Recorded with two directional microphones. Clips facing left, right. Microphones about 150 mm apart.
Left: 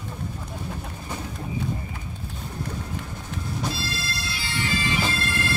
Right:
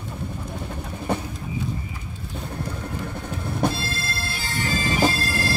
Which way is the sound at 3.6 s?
50° right (ahead or behind).